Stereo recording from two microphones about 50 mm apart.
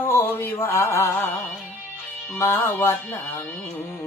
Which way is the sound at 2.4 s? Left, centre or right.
Left.